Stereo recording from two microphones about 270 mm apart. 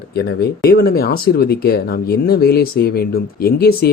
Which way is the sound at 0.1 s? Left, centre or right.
Left.